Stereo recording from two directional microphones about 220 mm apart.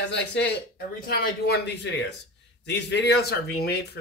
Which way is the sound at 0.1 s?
50° left (ahead or behind).